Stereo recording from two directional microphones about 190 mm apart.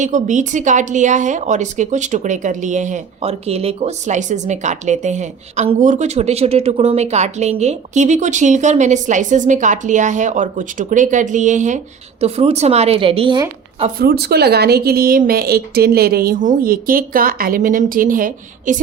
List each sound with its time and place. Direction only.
0.0 s a woman's voice: 40° right (ahead or behind); by 13.8 s 25° right (ahead or behind)
14.0 s speech: 55° right (ahead or behind)